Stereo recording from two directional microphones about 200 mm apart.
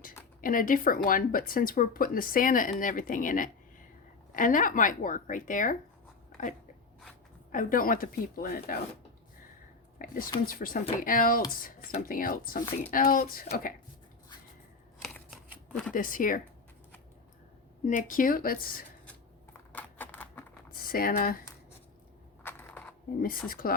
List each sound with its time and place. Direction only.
0.4 s speech: 45° left (ahead or behind)
7.5 s speech: 45° left (ahead or behind)
10.0 s speech: 45° left (ahead or behind)
15.0 s shuffling cards: centre (ahead or behind)
15.9 s speech: 45° left (ahead or behind)
17.8 s speech: 40° left (ahead or behind)
19.7 s a sound: 10° left (ahead or behind)
20.7 s speech: 45° left (ahead or behind)
22.4 s a sound: 10° left (ahead or behind)
23.5 s speech: 45° left (ahead or behind)